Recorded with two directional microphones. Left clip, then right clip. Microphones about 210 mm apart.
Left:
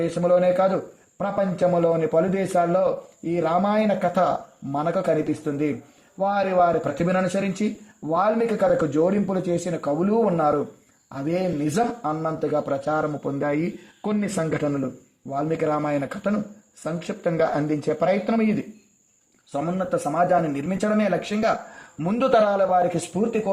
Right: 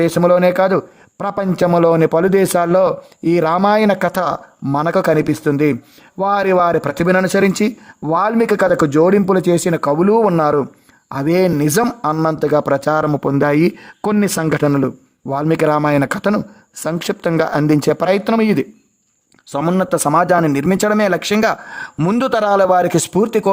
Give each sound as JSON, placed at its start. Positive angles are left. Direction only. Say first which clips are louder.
{"t": 0.0, "sound": "a man's voice", "louder": "right 7 dB", "side_deg": -45}
{"t": 19.5, "sound": "speech", "louder": "right 8 dB", "side_deg": -45}